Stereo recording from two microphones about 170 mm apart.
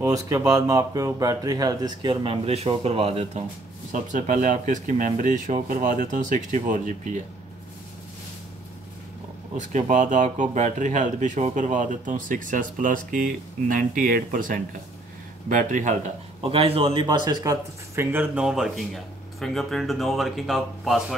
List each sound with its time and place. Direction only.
0.0 s speech: 20° right (ahead or behind); by 3.4 s 35° right (ahead or behind)
3.9 s speech: 50° right (ahead or behind)
9.6 s speech: 45° right (ahead or behind)
16.4 s speech: 35° right (ahead or behind); by 21.0 s centre (ahead or behind)